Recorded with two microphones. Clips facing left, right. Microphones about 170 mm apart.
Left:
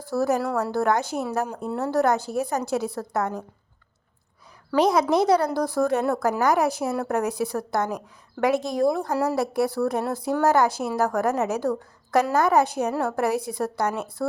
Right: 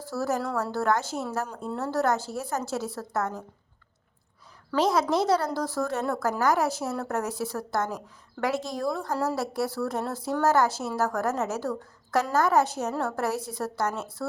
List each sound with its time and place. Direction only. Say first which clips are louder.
0.0 s a woman's voice: left 5 dB; 15° left (ahead or behind)
4.7 s a woman's voice: left 4 dB; 15° left (ahead or behind)